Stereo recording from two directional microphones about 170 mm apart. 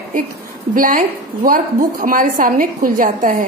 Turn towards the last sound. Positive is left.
turn(degrees=-50)  # may be behind; listen again after turning